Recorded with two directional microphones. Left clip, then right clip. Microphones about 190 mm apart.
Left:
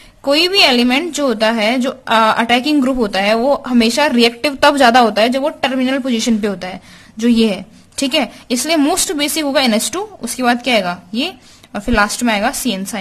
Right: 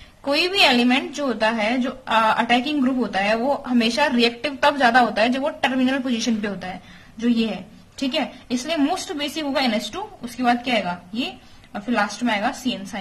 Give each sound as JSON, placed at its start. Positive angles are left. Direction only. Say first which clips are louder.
{"t": 0.2, "sound": "a woman's voice", "louder": "left 6 dB", "side_deg": 35}